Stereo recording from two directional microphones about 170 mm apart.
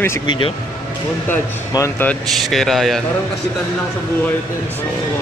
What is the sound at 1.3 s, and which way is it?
Speech, 15° left (ahead or behind).